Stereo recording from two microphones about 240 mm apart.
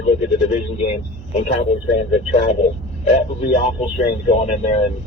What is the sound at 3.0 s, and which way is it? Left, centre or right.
Speech, left.